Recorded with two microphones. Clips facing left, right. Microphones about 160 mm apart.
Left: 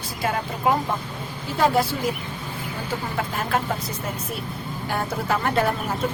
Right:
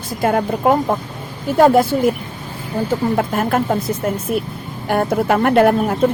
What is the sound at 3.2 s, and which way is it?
Speech, 50° right (ahead or behind).